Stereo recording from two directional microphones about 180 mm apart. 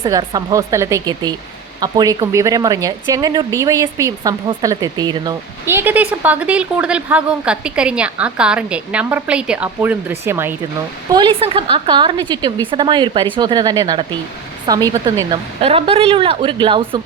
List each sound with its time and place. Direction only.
0.1 s speech: 20° right (ahead or behind)
5.6 s a woman's voice: 10° right (ahead or behind)
11.1 s speech: 25° right (ahead or behind)
15.6 s speech: 30° right (ahead or behind)